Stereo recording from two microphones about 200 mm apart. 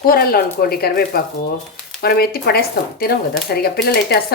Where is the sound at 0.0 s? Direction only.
45° left (ahead or behind).